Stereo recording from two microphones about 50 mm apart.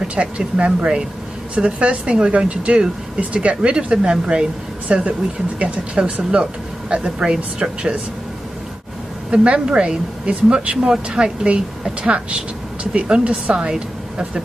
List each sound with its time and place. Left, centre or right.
0.2 s speech: right
9.3 s speech: right